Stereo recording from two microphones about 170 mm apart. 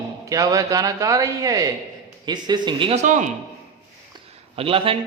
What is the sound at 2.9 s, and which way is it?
Speech, 45° right (ahead or behind).